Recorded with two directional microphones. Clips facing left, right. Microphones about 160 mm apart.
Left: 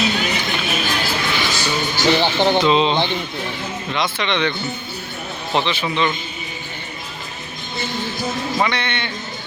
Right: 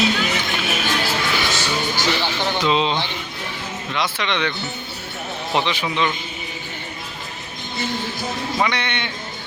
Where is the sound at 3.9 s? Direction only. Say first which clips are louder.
Left 2 dB; 5° right (ahead or behind).